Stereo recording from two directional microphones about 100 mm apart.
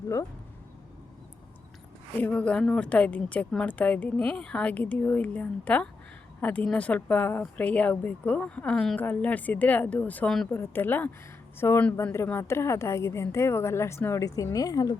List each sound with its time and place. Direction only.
2.2 s a woman's voice: 10° left (ahead or behind)
9.0 s a woman's voice: 15° left (ahead or behind)
10.2 s a woman's voice: 5° left (ahead or behind)
10.5 s a woman's voice: 20° left (ahead or behind)
14.3 s speech: 40° left (ahead or behind)